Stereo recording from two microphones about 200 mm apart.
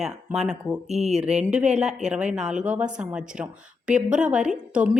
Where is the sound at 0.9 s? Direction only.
35° right (ahead or behind).